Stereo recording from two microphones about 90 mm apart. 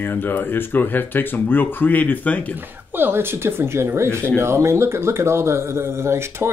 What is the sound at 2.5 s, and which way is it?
Speech, 20° right (ahead or behind).